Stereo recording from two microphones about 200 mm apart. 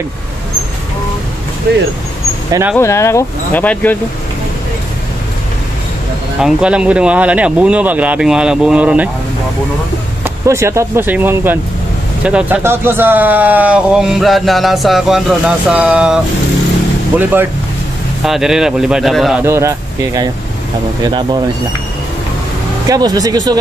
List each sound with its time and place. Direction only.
1.7 s speech: 55° right (ahead or behind)
2.8 s speech: 15° left (ahead or behind)
6.4 s speech: 5° right (ahead or behind)
10.2 s speech: 15° right (ahead or behind)
17.2 s speech: 10° right (ahead or behind)
19.4 s speech: 15° right (ahead or behind)
22.8 s speech: 20° right (ahead or behind)